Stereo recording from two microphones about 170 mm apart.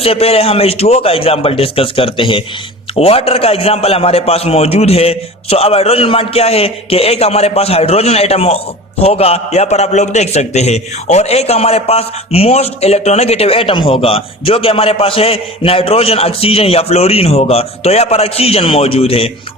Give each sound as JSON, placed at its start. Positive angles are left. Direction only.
{"t": 0.0, "sound": "a man's voice", "side_deg": 35}